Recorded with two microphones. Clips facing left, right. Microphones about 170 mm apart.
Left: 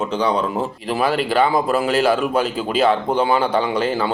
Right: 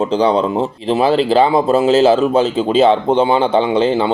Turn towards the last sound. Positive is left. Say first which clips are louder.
# right 6 dB
turn(degrees=-25)  # may be behind; listen again after turning